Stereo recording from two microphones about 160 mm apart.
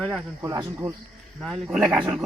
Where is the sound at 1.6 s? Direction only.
5° right (ahead or behind).